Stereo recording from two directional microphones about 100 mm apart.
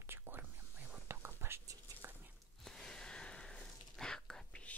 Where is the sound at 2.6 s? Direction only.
5° left (ahead or behind).